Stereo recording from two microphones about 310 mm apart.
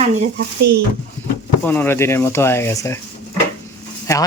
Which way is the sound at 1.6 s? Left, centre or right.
Centre.